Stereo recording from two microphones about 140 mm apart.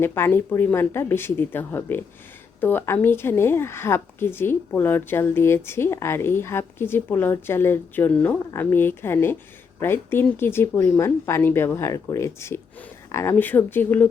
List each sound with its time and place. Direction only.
0.0 s a woman's voice: 15° left (ahead or behind)